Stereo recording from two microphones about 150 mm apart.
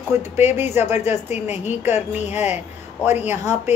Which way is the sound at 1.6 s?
15° right (ahead or behind).